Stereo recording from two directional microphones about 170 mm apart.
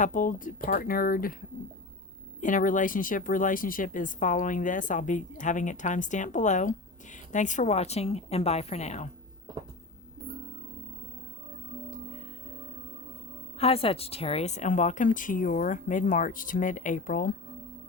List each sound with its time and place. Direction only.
0.0 s speech: 50° left (ahead or behind)
2.4 s speech: 50° left (ahead or behind)
13.6 s speech: 35° left (ahead or behind); by 17.3 s 55° left (ahead or behind)